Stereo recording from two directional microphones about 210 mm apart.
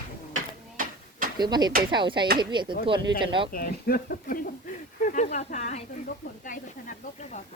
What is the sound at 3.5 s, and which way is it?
Speech, 45° left (ahead or behind).